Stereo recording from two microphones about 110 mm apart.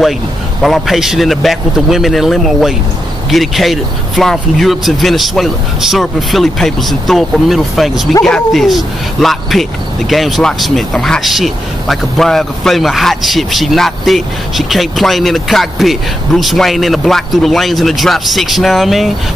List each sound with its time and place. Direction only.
0.6 s speech: centre (ahead or behind)